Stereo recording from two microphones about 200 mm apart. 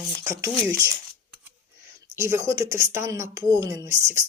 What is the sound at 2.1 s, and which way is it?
A woman's voice, 15° right (ahead or behind).